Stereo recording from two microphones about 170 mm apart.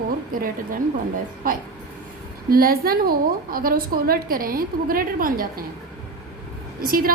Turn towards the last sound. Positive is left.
turn(degrees=-60)  # may be behind; listen again after turning